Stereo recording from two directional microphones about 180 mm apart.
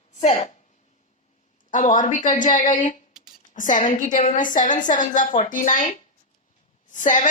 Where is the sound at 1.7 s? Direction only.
45° left (ahead or behind).